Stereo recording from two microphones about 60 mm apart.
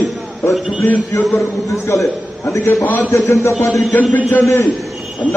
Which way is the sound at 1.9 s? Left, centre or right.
Left.